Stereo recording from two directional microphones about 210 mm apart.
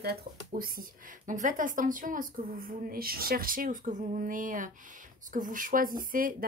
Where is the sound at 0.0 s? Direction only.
45° right (ahead or behind).